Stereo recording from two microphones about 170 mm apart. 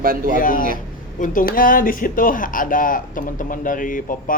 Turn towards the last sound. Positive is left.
turn(degrees=55)  # may be behind; listen again after turning